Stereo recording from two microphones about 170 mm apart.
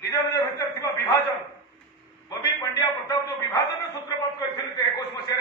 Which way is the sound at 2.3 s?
20° left (ahead or behind).